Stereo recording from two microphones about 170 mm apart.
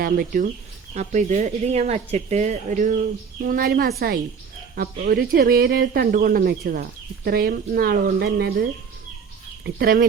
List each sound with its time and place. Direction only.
0.0 s speech: 60° right (ahead or behind)
0.9 s speech: 45° right (ahead or behind); by 8.5 s 70° right (ahead or behind)
9.6 s speech: 65° right (ahead or behind)